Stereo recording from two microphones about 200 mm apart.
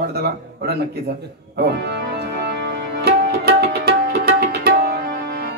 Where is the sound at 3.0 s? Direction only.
55° right (ahead or behind).